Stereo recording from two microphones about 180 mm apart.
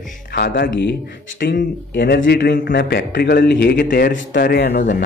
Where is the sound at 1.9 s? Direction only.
70° left (ahead or behind).